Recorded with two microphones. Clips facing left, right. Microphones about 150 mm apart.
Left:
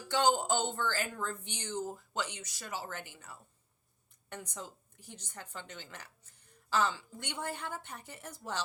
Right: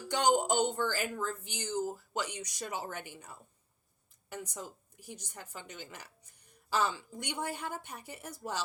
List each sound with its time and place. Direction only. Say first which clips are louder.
0.1 s speech: right 1 dB; 15° right (ahead or behind)